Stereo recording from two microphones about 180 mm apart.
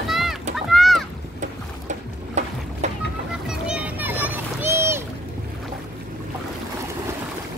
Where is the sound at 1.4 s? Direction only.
40° right (ahead or behind).